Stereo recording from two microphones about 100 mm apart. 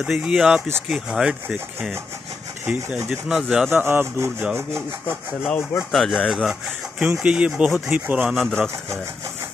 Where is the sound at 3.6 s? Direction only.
20° right (ahead or behind).